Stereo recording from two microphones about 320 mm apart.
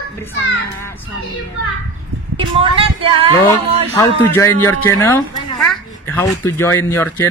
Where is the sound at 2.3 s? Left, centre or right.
Centre.